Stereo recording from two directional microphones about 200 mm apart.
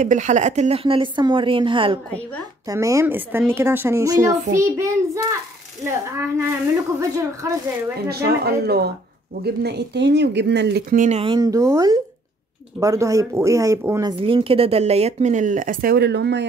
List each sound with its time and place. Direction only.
0.0 s a woman's voice: 35° right (ahead or behind); by 7.5 s 15° right (ahead or behind)
8.1 s speech: 55° right (ahead or behind); by 14.1 s 15° right (ahead or behind)
14.2 s speech: 25° right (ahead or behind); by 16.4 s 60° right (ahead or behind)